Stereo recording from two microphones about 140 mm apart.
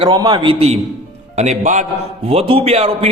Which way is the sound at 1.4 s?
60° right (ahead or behind).